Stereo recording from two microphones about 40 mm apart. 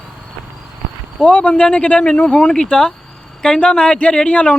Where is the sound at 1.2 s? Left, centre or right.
Left.